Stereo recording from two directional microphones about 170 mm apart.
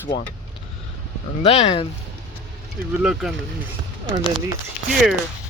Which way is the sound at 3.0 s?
Centre (ahead or behind).